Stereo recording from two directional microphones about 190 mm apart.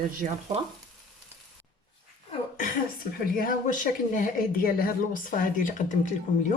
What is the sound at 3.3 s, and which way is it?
Speech, 45° left (ahead or behind).